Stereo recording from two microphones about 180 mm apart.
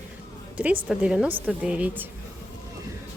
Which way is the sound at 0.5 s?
10° right (ahead or behind).